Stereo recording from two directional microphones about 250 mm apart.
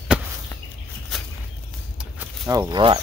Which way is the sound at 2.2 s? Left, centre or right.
Centre.